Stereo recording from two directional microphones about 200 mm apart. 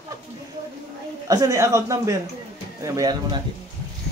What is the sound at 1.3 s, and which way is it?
A child's voice, 15° right (ahead or behind).